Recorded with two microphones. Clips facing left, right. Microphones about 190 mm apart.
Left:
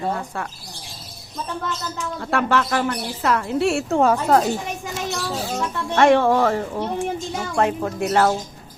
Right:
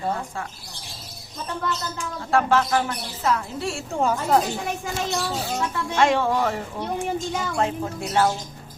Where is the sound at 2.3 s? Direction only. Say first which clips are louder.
Right 1 dB; 65° left (ahead or behind).